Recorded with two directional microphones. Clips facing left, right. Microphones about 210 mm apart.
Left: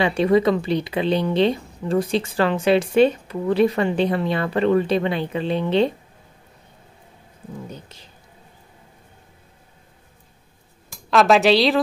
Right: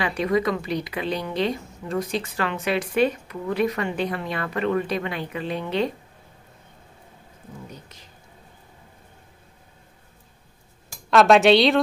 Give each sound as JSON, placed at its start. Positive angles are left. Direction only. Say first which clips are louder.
{"t": 0.0, "sound": "speech", "louder": "left 6 dB", "side_deg": 30}
{"t": 7.7, "sound": "speech", "louder": "left 4 dB", "side_deg": 30}
{"t": 10.9, "sound": "speech", "louder": "even", "side_deg": 0}